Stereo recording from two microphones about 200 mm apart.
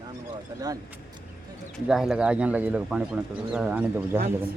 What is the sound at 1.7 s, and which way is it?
Speech, centre (ahead or behind).